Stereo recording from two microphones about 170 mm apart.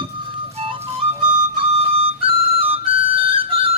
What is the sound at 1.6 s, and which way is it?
Flute, 35° right (ahead or behind).